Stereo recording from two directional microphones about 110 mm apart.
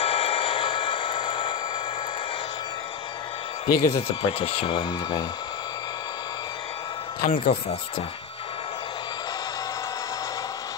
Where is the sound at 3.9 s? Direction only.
55° left (ahead or behind).